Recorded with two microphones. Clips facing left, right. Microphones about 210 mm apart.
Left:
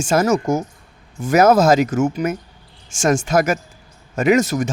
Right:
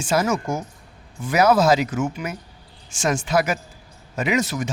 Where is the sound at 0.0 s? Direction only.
45° left (ahead or behind).